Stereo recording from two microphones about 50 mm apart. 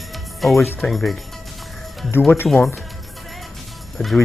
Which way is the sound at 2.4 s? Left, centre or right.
Centre.